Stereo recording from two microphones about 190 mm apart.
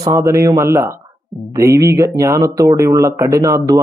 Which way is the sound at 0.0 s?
15° right (ahead or behind).